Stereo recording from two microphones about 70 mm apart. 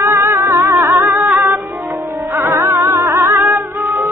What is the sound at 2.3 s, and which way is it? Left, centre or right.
Music, right.